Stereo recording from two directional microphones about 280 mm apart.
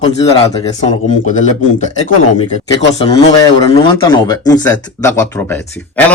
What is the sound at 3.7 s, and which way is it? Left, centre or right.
A man's voice, centre.